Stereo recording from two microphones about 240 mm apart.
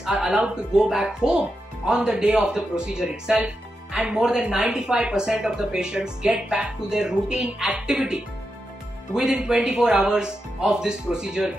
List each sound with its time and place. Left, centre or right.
0.0 s speech: centre